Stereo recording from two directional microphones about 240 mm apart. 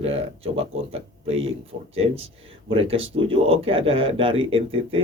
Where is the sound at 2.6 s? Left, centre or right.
Right.